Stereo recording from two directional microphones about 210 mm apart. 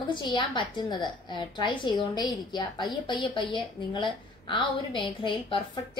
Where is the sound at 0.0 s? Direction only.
20° left (ahead or behind).